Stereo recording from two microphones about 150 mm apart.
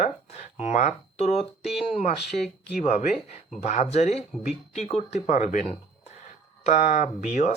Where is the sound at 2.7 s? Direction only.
45° left (ahead or behind).